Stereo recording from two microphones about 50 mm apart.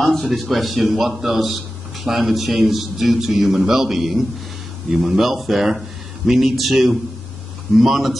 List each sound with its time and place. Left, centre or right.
0.0 s a man's voice: centre